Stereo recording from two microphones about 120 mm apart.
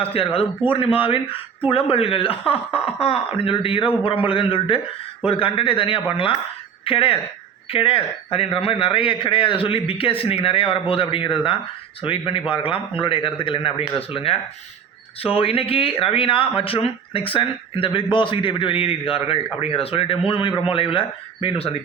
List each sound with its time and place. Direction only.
0.1 s speech: 55° left (ahead or behind)
15.4 s speech: 50° left (ahead or behind)